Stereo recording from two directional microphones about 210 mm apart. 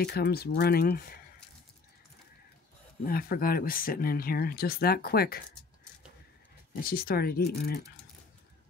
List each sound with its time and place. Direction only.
0.0 s speech: 50° left (ahead or behind)
3.1 s speech: 45° left (ahead or behind)
6.8 s speech: 45° left (ahead or behind)